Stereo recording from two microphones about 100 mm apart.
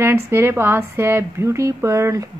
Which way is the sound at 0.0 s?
25° right (ahead or behind).